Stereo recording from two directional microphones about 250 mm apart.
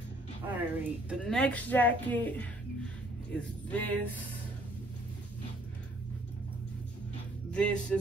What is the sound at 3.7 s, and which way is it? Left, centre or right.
Speech, centre.